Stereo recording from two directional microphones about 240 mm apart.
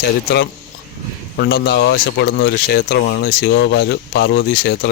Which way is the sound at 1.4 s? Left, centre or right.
Left.